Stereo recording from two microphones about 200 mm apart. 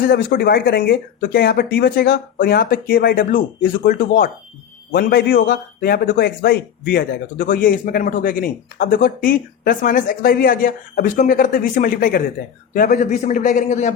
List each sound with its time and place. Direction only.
0.1 s a man's voice: 45° left (ahead or behind)